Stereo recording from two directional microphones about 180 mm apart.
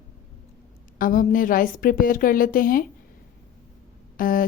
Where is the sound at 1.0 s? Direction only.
50° left (ahead or behind).